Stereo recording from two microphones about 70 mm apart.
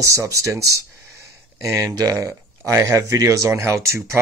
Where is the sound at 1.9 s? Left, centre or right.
Right.